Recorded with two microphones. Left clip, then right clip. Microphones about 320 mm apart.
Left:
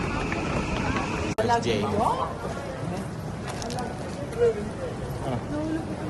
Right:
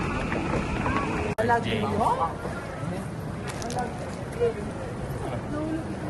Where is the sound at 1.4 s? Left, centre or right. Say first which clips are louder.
Left 1 dB; centre.